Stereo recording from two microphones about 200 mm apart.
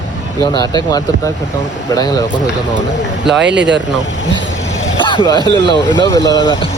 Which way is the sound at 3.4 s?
60° right (ahead or behind).